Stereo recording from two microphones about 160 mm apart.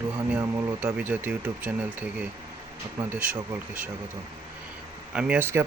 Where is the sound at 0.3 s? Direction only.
10° right (ahead or behind).